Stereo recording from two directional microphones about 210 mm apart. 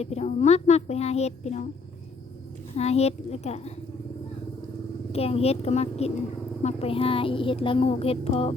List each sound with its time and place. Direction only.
0.0 s a child's voice: 30° left (ahead or behind)
2.7 s a child's voice: 30° left (ahead or behind)
5.1 s speech: 30° left (ahead or behind)